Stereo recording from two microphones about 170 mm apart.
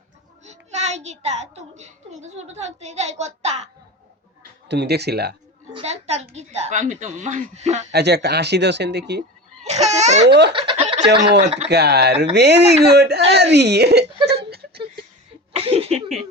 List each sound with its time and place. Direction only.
0.4 s a child's voice: 40° right (ahead or behind)
4.7 s speech: 80° right
5.7 s speech: 40° right (ahead or behind)
7.9 s speech: 75° right (ahead or behind)
9.6 s laughter: 40° right (ahead or behind)
10.2 s speech: 90° right
10.5 s snicker: 30° right (ahead or behind)
11.7 s speech: 75° right (ahead or behind)
14.3 s a sound: 70° right (ahead or behind)
15.5 s a sound: 35° right (ahead or behind)